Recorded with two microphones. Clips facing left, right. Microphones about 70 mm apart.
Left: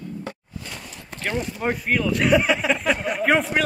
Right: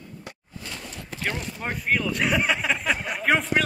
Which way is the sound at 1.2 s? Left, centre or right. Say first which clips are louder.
Left 5 dB; centre.